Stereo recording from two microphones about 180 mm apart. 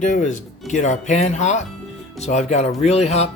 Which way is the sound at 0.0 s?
45° left (ahead or behind).